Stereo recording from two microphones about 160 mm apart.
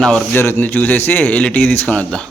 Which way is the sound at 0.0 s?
5° left (ahead or behind).